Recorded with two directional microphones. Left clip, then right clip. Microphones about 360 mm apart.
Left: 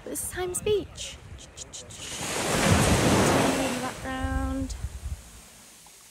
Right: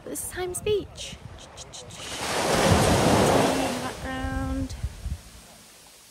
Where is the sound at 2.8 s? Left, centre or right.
Right.